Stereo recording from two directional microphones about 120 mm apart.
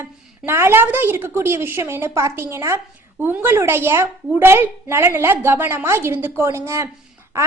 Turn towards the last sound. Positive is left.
turn(degrees=-20)  # may be behind; listen again after turning